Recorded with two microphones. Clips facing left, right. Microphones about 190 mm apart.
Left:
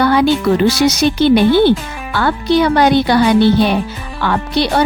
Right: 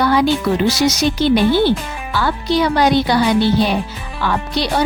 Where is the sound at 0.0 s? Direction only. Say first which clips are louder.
Left 3 dB; 60° left (ahead or behind).